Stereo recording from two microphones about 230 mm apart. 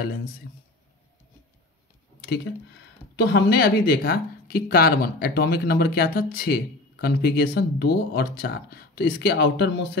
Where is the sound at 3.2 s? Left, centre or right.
Left.